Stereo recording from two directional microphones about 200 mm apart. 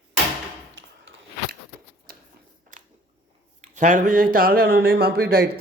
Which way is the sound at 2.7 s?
40° right (ahead or behind).